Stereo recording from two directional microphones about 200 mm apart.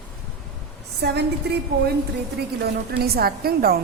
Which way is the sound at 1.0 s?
50° right (ahead or behind).